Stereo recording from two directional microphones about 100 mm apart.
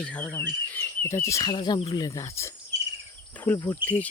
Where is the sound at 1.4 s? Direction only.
45° left (ahead or behind); by 2.5 s 30° left (ahead or behind).